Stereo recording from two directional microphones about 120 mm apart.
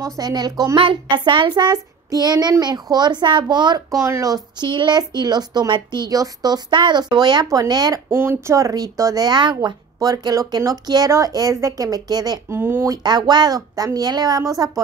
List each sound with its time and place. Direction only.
0.2 s speech: 35° right (ahead or behind)
8.1 s speech: 20° right (ahead or behind)
12.4 s speech: 20° right (ahead or behind)
12.8 s speech: 35° right (ahead or behind)